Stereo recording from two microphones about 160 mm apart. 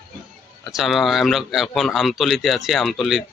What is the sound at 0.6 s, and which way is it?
Speech, centre (ahead or behind).